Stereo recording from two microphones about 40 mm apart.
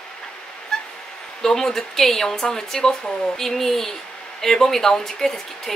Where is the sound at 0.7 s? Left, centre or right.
Centre.